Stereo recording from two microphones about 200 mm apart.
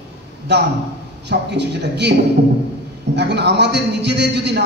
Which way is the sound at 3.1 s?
55° right (ahead or behind).